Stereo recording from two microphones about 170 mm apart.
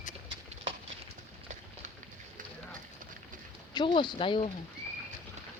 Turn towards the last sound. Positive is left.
turn(degrees=30)  # may be behind; listen again after turning